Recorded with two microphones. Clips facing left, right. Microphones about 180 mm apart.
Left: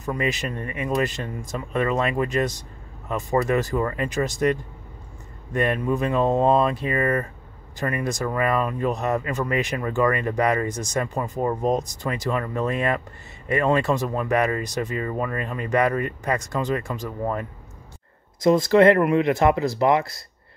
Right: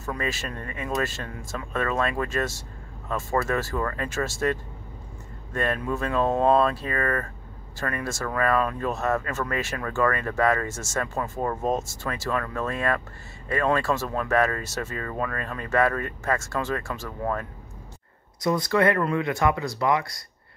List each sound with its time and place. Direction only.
0.0 s speech: 15° left (ahead or behind)